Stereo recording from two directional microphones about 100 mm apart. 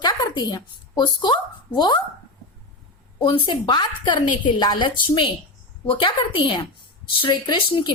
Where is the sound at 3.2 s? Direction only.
55° left (ahead or behind).